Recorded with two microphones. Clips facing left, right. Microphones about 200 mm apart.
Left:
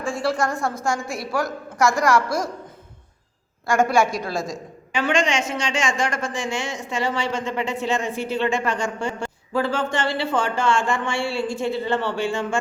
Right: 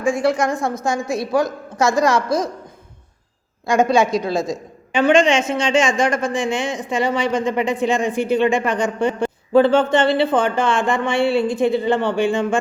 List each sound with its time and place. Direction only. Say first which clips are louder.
0.0 s a woman's voice: right 5 dB; 15° right (ahead or behind)
3.7 s a woman's voice: right 3 dB; 20° right (ahead or behind)